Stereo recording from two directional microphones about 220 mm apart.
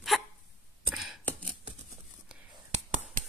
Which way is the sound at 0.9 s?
Centre (ahead or behind).